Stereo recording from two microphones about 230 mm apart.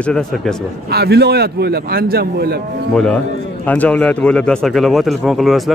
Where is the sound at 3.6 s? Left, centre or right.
Centre.